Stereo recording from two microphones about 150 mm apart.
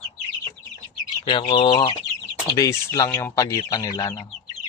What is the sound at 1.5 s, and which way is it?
Speech, 35° left (ahead or behind).